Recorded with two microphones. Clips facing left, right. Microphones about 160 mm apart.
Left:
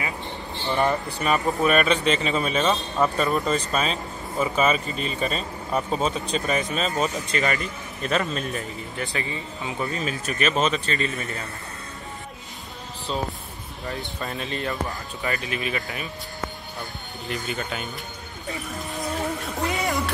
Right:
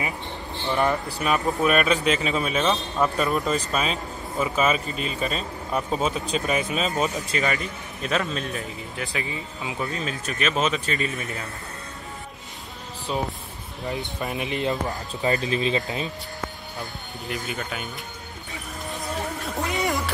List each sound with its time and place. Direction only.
0.7 s speech: centre (ahead or behind)
13.1 s speech: 10° right (ahead or behind)
15.2 s speech: 30° right (ahead or behind)
17.3 s speech: 5° right (ahead or behind)